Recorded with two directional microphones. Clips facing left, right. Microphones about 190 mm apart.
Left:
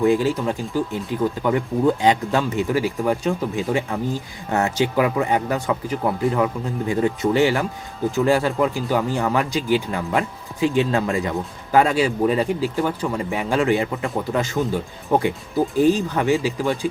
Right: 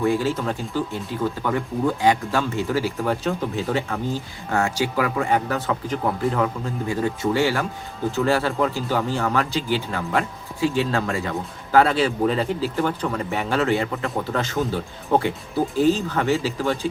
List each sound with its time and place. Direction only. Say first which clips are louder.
0.0 s speech: left 3 dB; 15° left (ahead or behind)
15.7 s speech: left 2 dB; 15° left (ahead or behind)